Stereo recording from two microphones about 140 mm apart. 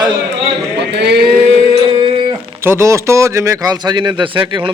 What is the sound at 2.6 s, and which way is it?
Speech, 20° right (ahead or behind).